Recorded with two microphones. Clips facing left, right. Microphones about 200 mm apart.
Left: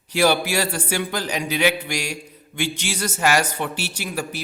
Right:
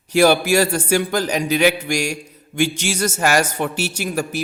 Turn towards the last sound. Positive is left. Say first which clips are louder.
# right 5 dB
turn(degrees=-45)  # may be behind; listen again after turning